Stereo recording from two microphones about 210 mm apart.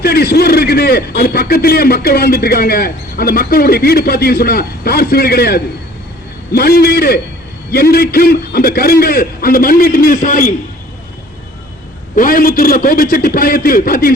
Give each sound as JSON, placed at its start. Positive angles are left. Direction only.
{"t": 0.0, "sound": "a man's voice", "side_deg": 50}
{"t": 12.1, "sound": "a man's voice", "side_deg": 40}